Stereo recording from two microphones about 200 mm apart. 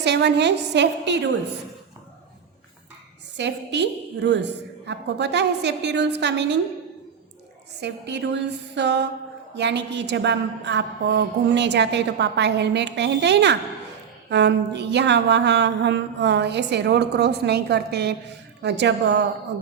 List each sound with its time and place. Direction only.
0.0 s a woman's voice: 60° right (ahead or behind)
3.3 s a woman's voice: 60° right (ahead or behind)
7.8 s a woman's voice: 60° right (ahead or behind)